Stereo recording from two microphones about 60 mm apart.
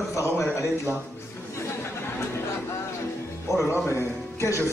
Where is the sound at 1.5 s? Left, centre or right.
Left.